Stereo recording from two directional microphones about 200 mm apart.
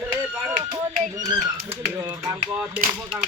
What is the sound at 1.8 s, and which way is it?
Speech, 15° right (ahead or behind).